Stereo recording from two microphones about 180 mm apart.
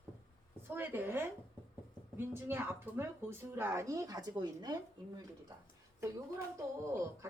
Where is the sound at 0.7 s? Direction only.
10° right (ahead or behind).